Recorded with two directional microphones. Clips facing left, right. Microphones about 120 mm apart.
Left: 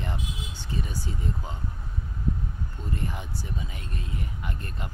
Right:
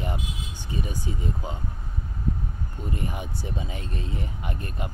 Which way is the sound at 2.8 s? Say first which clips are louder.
Right 2 dB; 10° right (ahead or behind).